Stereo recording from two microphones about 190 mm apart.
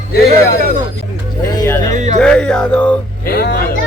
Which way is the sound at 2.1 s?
5° left (ahead or behind).